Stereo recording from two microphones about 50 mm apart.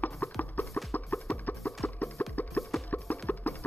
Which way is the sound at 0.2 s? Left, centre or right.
Left.